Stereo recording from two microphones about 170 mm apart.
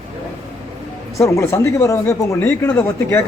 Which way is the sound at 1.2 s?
15° left (ahead or behind).